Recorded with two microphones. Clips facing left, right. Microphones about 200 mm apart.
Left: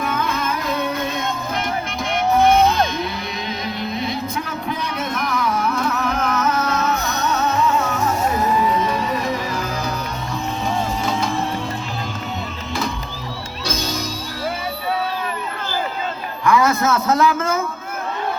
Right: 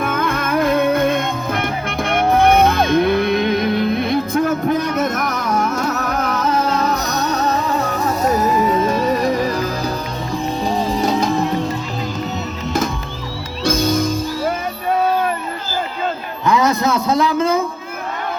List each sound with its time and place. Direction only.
0.0 s music: 50° right (ahead or behind)
11.0 s music: 40° right (ahead or behind)
13.7 s music: 50° right (ahead or behind)
16.5 s a sound: 20° right (ahead or behind)